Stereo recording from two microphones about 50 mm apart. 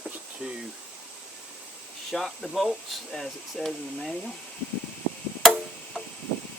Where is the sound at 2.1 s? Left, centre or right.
Centre.